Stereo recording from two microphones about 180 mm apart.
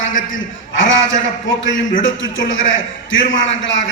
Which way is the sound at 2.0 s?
90° left.